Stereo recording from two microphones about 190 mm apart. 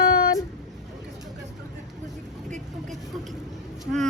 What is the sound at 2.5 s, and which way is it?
Vehicle, 40° right (ahead or behind).